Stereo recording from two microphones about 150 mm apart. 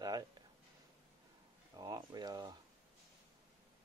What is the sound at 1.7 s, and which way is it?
Speech, 25° right (ahead or behind).